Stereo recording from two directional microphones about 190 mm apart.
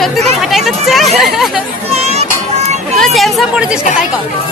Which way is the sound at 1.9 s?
35° right (ahead or behind).